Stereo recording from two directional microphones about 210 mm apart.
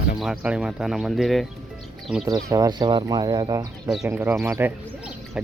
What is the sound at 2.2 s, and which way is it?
Speech, 15° right (ahead or behind).